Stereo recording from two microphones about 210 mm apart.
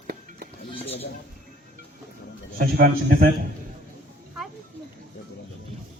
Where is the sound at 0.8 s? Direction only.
30° left (ahead or behind).